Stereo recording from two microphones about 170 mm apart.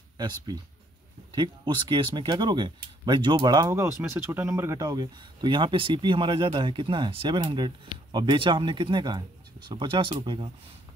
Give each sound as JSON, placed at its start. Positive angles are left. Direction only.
{"t": 0.5, "sound": "speech", "side_deg": -20}